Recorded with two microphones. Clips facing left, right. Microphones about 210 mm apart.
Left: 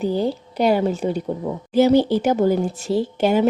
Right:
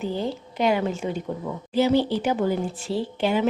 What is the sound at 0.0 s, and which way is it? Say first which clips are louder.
Speech: left 6 dB; 35° left (ahead or behind).